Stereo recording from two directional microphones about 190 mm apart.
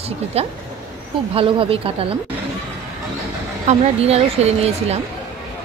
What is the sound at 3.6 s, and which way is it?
A woman's voice, 35° right (ahead or behind).